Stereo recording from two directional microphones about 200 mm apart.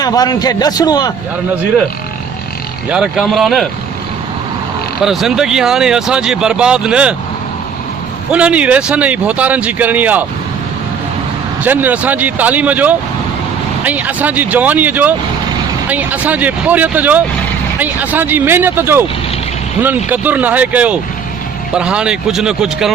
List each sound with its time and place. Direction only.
0.0 s a man's voice: 20° left (ahead or behind)
2.9 s speech: 5° right (ahead or behind)
5.0 s speech: centre (ahead or behind)
8.3 s speech: 5° right (ahead or behind)
11.6 s speech: 10° right (ahead or behind)
20.1 s speech: 10° right (ahead or behind)